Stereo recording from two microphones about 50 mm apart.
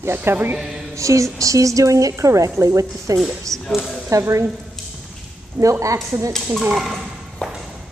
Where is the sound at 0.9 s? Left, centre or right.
Right.